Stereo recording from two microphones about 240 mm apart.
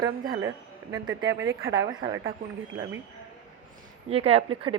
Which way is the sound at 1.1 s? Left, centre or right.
Right.